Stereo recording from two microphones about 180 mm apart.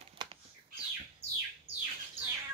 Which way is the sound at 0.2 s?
25° right (ahead or behind).